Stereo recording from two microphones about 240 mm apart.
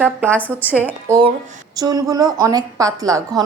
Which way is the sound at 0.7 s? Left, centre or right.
Centre.